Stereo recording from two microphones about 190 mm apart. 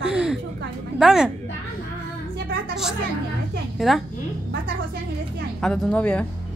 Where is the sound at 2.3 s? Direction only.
55° right (ahead or behind).